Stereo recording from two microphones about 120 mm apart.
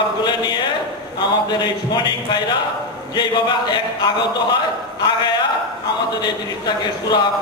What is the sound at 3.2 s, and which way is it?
Speech, 40° left (ahead or behind).